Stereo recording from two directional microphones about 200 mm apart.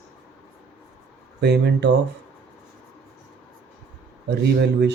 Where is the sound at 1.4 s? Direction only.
60° right (ahead or behind).